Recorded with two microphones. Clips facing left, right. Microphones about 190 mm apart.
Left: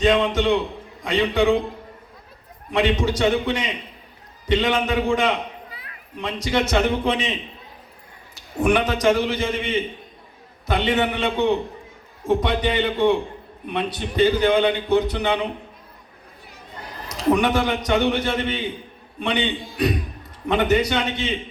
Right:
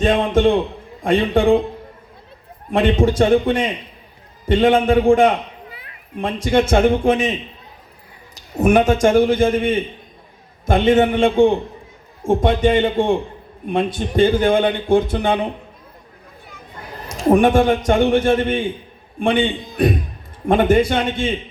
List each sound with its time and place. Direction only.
0.0 s a man's voice: 50° right (ahead or behind)
2.7 s a man's voice: 50° right (ahead or behind)
8.5 s a man's voice: 45° right (ahead or behind)
17.1 s a man's voice: 50° right (ahead or behind)